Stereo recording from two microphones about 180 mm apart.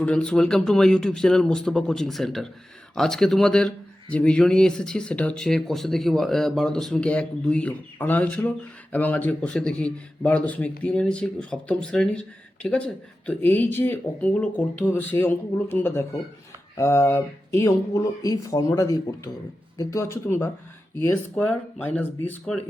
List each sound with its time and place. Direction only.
0.0 s speech: 5° left (ahead or behind)